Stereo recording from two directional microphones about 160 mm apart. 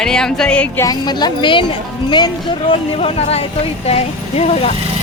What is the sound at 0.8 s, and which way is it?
Speech, 25° left (ahead or behind).